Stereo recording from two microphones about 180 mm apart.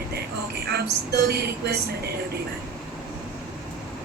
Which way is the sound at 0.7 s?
60° right (ahead or behind).